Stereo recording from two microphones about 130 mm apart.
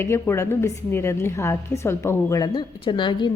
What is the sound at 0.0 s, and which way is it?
A woman's voice, 20° left (ahead or behind).